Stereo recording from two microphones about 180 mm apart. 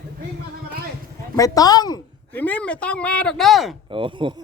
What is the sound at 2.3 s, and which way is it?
Speech, 10° left (ahead or behind).